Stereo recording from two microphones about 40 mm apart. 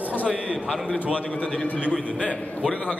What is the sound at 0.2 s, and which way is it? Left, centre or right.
Speech, right.